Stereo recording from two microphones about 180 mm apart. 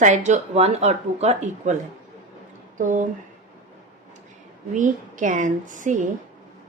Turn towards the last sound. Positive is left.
turn(degrees=-45)  # may be behind; listen again after turning